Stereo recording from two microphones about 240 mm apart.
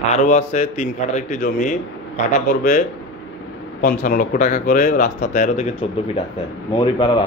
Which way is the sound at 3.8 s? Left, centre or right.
Left.